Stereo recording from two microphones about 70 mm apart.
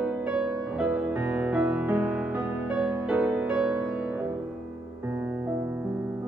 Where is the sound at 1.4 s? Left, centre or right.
Right.